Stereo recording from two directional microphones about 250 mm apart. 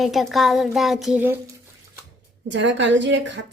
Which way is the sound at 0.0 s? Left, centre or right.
Centre.